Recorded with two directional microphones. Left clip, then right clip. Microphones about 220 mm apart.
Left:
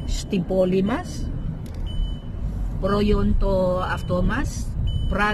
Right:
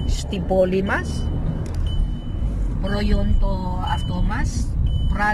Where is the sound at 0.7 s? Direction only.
20° left (ahead or behind).